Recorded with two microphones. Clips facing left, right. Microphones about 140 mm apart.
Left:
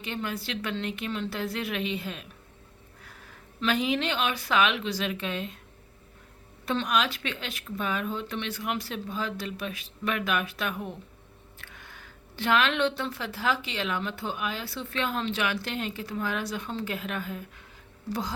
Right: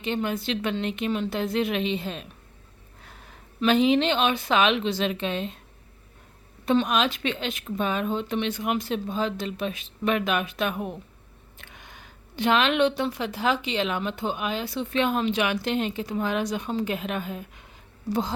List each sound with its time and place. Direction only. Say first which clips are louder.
0.0 s speech: right 6 dB; 25° right (ahead or behind)
6.7 s speech: right 5 dB; 20° right (ahead or behind)